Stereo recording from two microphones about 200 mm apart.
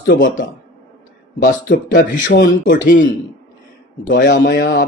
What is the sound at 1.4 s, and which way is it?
Speech, 40° left (ahead or behind).